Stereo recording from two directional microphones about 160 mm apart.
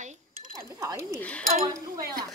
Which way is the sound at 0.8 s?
20° right (ahead or behind).